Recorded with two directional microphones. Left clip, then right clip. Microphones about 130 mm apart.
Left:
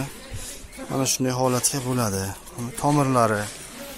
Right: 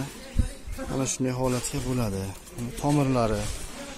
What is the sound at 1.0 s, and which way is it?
Speech, 15° left (ahead or behind).